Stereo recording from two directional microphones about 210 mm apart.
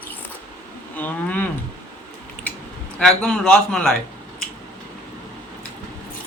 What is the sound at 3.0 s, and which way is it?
Speech, 5° left (ahead or behind).